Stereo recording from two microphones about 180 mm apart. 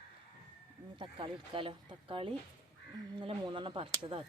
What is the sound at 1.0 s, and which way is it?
Speech, 30° right (ahead or behind).